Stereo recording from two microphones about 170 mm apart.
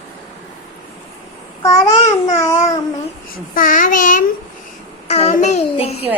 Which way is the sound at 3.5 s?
55° left (ahead or behind).